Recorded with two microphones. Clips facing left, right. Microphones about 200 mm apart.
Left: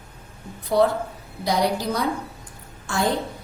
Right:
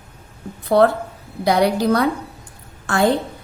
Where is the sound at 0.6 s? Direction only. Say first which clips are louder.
Right 5 dB; 60° right (ahead or behind).